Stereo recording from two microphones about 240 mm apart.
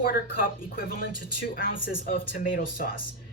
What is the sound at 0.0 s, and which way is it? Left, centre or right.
Speech, left.